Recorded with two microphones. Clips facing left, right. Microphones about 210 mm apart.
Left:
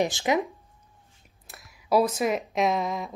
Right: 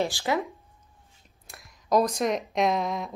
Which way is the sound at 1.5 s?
5° left (ahead or behind).